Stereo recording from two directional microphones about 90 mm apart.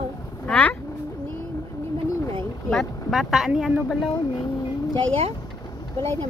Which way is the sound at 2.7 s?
Centre (ahead or behind).